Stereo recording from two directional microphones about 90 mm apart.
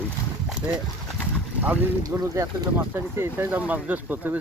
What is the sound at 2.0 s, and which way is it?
Speech, 35° right (ahead or behind).